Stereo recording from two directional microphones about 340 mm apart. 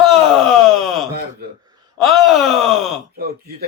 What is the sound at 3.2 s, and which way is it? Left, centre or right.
Speech, right.